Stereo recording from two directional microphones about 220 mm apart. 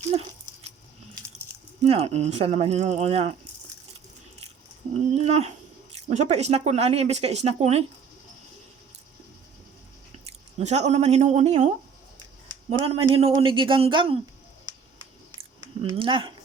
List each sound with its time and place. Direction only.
1.8 s speech: 30° right (ahead or behind)
4.9 s speech: 30° right (ahead or behind)
10.2 s speech: 30° right (ahead or behind)
12.8 s speech: 25° right (ahead or behind)
15.8 s speech: 25° right (ahead or behind)